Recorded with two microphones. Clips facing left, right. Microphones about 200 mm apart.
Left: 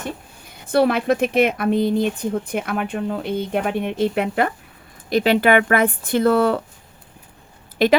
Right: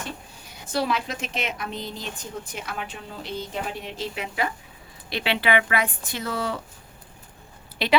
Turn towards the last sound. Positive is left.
turn(degrees=50)  # may be behind; listen again after turning